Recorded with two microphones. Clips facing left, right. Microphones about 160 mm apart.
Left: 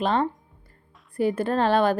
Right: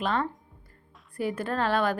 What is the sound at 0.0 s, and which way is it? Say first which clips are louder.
A woman's voice: left 5 dB; 30° left (ahead or behind).